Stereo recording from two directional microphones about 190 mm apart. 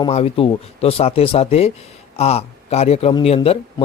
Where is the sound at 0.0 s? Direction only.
30° left (ahead or behind).